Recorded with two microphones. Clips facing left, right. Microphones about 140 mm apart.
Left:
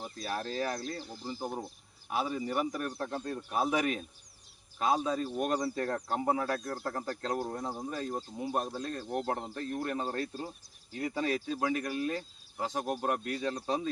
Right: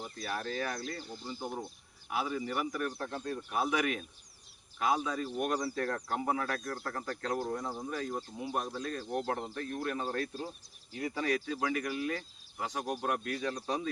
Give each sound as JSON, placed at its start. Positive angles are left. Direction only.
{"t": 0.0, "sound": "speech", "side_deg": 25}